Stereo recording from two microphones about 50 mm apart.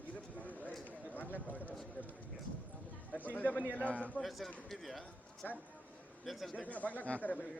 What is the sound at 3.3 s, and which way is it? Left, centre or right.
Speech, left.